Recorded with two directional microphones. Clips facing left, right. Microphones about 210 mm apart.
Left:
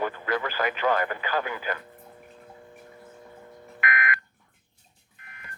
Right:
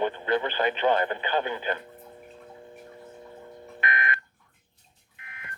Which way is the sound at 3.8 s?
30° right (ahead or behind).